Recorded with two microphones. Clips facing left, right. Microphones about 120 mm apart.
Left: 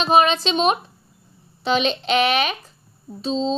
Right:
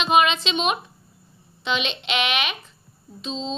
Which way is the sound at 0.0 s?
35° left (ahead or behind).